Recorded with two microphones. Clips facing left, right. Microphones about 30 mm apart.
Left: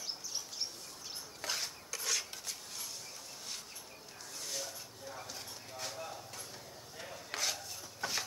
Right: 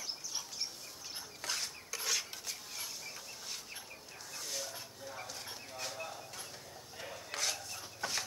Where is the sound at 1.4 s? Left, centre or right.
Centre.